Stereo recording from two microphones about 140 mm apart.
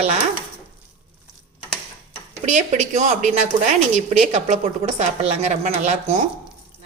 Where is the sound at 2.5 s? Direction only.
60° right (ahead or behind).